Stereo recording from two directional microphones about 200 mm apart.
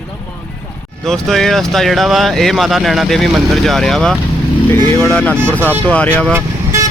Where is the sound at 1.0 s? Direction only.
Centre (ahead or behind).